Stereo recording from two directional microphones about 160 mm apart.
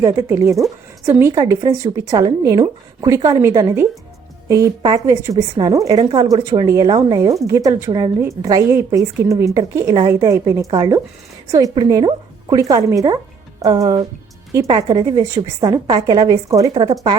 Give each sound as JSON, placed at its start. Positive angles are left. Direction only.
{"t": 0.0, "sound": "speech", "side_deg": -20}